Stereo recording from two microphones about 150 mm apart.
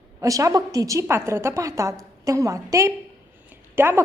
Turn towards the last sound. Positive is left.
turn(degrees=-15)  # may be behind; listen again after turning